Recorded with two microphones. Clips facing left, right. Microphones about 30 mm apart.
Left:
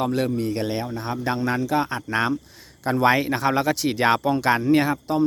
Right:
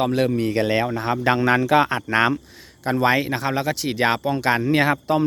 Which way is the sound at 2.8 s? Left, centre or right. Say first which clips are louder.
Even; centre.